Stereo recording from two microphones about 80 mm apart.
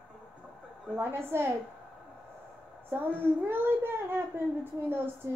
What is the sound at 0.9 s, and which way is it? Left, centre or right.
Speech, right.